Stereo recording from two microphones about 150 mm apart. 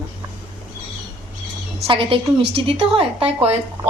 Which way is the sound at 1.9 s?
35° right (ahead or behind).